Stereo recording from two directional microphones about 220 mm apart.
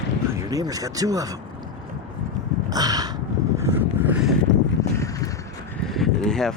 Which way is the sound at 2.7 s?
15° right (ahead or behind).